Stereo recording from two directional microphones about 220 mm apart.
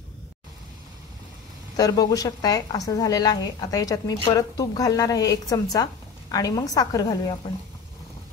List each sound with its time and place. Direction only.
1.8 s a woman's voice: 15° left (ahead or behind)